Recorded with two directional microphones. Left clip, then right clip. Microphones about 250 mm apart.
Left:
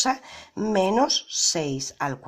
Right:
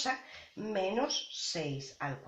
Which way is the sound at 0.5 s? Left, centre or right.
Left.